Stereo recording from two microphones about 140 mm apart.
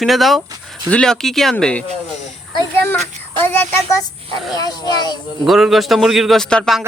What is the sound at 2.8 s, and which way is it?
Speech, 15° left (ahead or behind).